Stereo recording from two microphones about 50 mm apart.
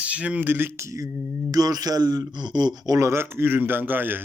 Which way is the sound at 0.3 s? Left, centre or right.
Right.